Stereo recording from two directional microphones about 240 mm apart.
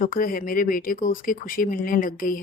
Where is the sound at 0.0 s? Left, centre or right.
Left.